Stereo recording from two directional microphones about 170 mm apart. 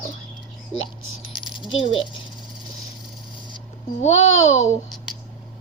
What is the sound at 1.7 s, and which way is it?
Speech, 30° left (ahead or behind).